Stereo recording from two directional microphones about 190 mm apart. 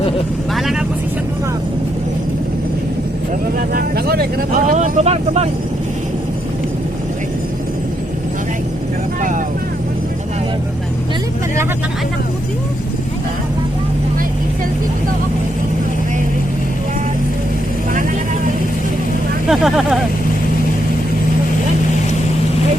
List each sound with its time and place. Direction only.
3.8 s speech: 55° right (ahead or behind)
4.5 s speech: 40° right (ahead or behind)
19.5 s speech: centre (ahead or behind)